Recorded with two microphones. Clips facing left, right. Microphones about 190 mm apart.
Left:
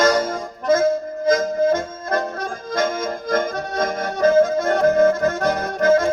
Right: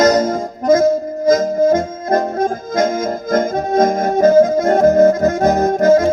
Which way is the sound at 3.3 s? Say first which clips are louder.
Right 7 dB; 45° right (ahead or behind).